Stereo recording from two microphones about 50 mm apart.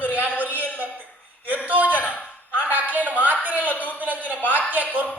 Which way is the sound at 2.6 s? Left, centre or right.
Right.